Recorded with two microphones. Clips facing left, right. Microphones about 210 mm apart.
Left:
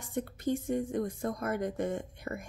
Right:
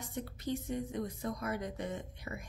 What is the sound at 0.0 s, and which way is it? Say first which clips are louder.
A woman's voice: left 6 dB; 50° left (ahead or behind).